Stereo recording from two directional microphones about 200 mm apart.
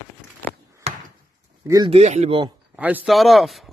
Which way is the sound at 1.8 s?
35° right (ahead or behind).